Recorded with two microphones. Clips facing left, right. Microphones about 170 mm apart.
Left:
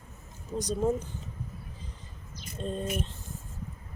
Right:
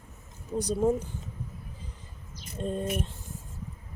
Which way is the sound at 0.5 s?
10° right (ahead or behind).